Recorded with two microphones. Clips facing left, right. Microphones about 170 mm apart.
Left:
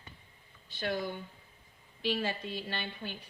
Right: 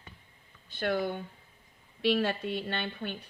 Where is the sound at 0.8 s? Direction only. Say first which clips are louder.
Right 4 dB; 55° right (ahead or behind).